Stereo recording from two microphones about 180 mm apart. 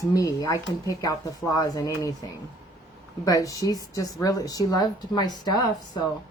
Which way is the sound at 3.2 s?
20° left (ahead or behind).